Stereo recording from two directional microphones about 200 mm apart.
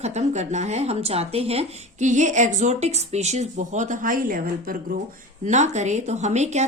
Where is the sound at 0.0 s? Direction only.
35° right (ahead or behind).